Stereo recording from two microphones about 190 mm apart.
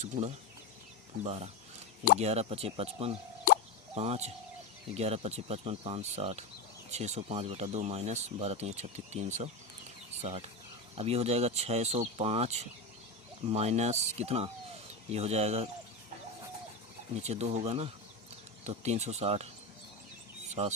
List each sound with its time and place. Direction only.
0.0 s speech: 35° right (ahead or behind)
17.2 s speech: 35° right (ahead or behind)
20.6 s speech: 35° right (ahead or behind)